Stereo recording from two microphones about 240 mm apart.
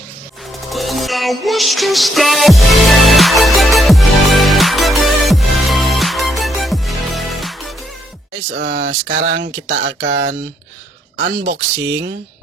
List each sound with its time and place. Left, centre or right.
0.7 s music: centre
8.5 s speech: right